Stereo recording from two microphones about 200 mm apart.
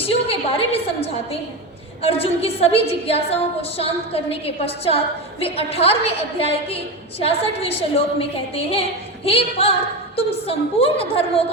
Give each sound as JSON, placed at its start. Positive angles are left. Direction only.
{"t": 0.0, "sound": "a woman's voice", "side_deg": 30}